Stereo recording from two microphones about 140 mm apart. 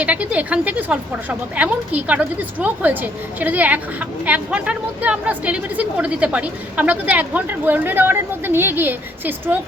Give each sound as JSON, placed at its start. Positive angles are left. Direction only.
{"t": 0.0, "sound": "a woman's voice", "side_deg": -10}